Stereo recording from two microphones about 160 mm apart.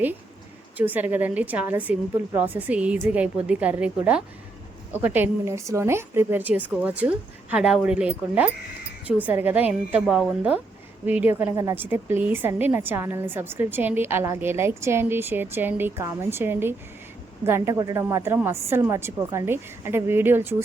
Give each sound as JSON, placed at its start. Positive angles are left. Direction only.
{"t": 0.8, "sound": "a woman's voice", "side_deg": -10}